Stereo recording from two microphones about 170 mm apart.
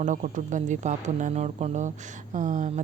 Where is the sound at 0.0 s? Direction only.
50° right (ahead or behind).